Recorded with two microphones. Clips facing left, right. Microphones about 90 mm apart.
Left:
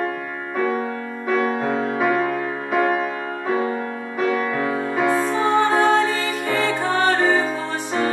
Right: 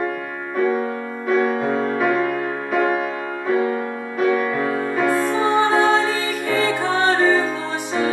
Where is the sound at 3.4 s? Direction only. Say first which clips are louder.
Right 3 dB; 25° left (ahead or behind).